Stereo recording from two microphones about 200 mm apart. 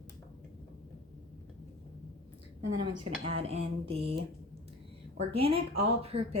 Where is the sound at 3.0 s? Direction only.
30° right (ahead or behind).